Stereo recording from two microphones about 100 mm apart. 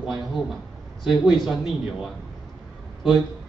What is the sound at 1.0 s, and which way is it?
Speech, 50° left (ahead or behind).